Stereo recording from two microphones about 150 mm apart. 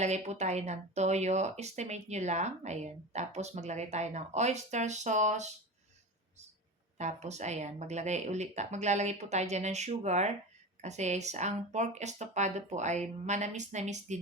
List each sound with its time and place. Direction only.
0.0 s speech: 50° right (ahead or behind)
7.0 s speech: 50° right (ahead or behind)